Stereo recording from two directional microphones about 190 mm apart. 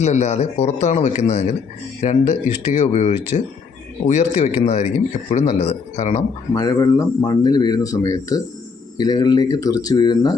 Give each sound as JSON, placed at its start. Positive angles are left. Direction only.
{"t": 0.0, "sound": "speech", "side_deg": 35}
{"t": 6.5, "sound": "speech", "side_deg": 20}